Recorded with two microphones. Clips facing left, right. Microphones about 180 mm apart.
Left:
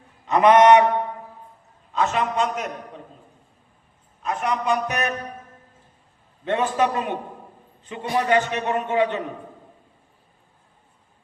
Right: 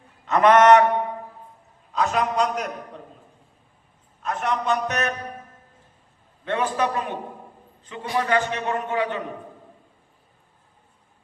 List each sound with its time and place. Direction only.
0.3 s a man's voice: 15° left (ahead or behind)
1.9 s a man's voice: centre (ahead or behind)
4.2 s a man's voice: 5° left (ahead or behind)
6.4 s a man's voice: 20° left (ahead or behind)